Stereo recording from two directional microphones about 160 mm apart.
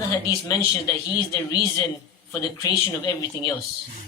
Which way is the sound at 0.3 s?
20° left (ahead or behind).